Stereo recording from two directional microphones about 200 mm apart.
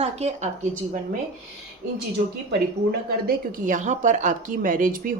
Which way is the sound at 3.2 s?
40° right (ahead or behind).